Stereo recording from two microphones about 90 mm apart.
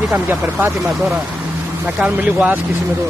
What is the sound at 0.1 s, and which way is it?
Speech, 25° right (ahead or behind).